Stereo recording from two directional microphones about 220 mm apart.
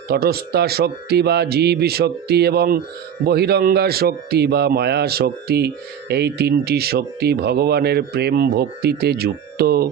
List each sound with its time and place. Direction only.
0.1 s speech: 45° right (ahead or behind)